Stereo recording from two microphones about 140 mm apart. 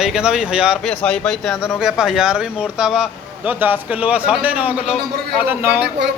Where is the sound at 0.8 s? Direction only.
5° left (ahead or behind); by 5.8 s 15° right (ahead or behind).